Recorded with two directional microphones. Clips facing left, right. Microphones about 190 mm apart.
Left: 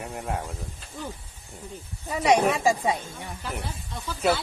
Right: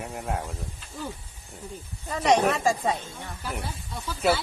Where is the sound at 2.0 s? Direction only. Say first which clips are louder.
Left 1 dB; 10° left (ahead or behind).